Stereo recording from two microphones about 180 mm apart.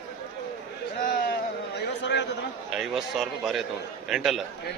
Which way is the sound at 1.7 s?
75° left (ahead or behind).